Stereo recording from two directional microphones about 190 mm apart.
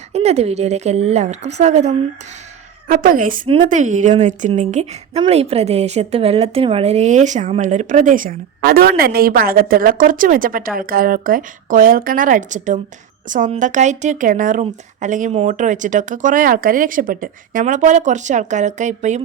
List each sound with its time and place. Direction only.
0.1 s a woman's voice: 35° right (ahead or behind)
2.9 s a woman's voice: 50° right (ahead or behind)
3.4 s a woman's voice: 25° right (ahead or behind)
3.7 s a woman's voice: 40° right (ahead or behind)